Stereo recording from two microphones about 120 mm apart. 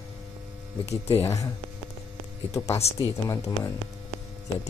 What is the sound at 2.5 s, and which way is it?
Speech, 25° left (ahead or behind).